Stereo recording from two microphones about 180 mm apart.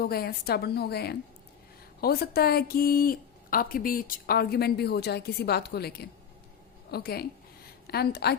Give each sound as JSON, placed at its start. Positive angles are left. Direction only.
{"t": 0.0, "sound": "speech", "side_deg": 55}